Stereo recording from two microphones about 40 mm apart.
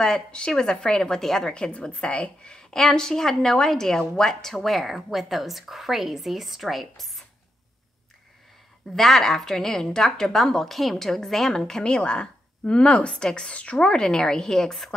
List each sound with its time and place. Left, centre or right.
0.0 s a woman's voice: centre
1.5 s a woman's voice: left; by 7.2 s centre
8.9 s a woman's voice: centre